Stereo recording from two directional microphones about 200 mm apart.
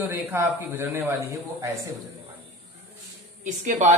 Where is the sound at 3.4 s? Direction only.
35° right (ahead or behind).